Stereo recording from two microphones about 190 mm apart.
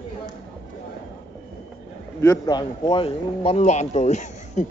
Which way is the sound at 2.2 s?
20° left (ahead or behind).